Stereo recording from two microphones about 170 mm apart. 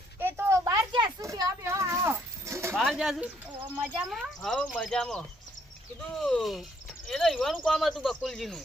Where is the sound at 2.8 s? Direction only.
Centre (ahead or behind).